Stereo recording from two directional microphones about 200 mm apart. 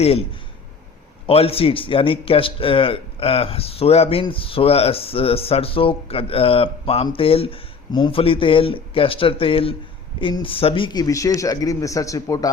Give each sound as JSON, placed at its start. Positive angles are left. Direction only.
{"t": 0.0, "sound": "a man's voice", "side_deg": 30}
{"t": 1.3, "sound": "a man's voice", "side_deg": 30}